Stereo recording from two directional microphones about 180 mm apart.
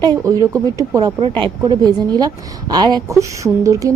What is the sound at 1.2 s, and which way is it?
A woman's voice, 30° right (ahead or behind).